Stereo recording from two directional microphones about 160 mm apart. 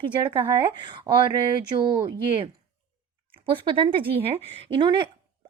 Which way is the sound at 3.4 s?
35° right (ahead or behind).